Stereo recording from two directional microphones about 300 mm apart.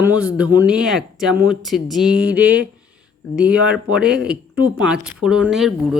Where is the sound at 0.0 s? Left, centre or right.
Centre.